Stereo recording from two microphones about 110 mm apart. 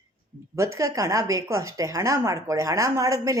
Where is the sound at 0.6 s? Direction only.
30° right (ahead or behind).